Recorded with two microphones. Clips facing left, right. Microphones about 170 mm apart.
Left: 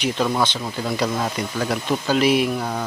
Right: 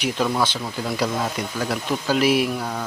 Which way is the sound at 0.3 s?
5° right (ahead or behind).